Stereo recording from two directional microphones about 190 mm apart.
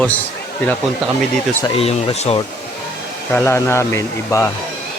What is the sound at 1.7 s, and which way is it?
Speech, 35° left (ahead or behind).